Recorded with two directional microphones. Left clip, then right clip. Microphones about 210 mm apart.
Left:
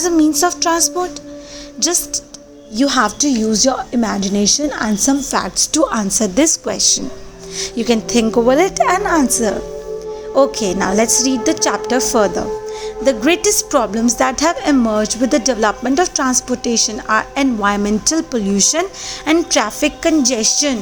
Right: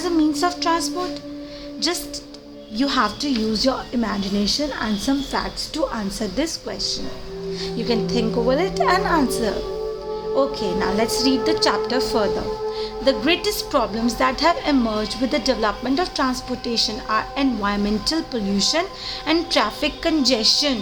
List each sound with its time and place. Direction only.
0.0 s a woman's voice: 25° left (ahead or behind)
10.3 s a woman's voice: 35° left (ahead or behind)